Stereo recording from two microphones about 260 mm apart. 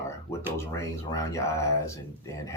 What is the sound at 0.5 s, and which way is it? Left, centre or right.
Speech, centre.